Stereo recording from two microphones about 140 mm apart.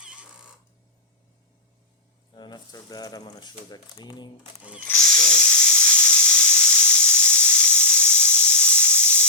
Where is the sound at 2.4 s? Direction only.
30° left (ahead or behind).